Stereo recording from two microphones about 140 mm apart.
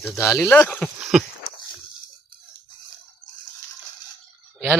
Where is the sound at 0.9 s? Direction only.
5° right (ahead or behind).